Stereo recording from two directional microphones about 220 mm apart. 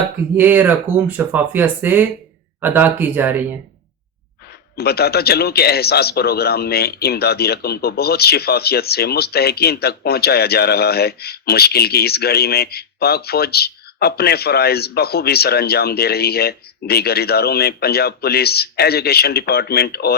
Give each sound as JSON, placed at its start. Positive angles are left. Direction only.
{"t": 0.3, "sound": "speech", "side_deg": -10}
{"t": 4.8, "sound": "a man's voice", "side_deg": 45}